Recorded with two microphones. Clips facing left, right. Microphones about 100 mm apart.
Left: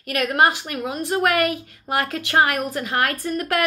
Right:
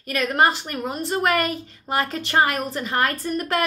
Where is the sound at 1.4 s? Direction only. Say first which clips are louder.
Left 4 dB; 65° left (ahead or behind).